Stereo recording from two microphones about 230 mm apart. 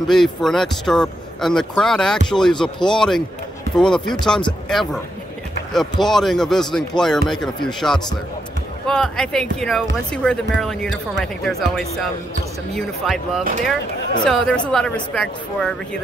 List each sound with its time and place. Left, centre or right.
0.1 s speech: centre